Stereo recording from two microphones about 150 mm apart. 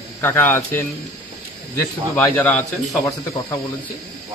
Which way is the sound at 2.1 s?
10° left (ahead or behind).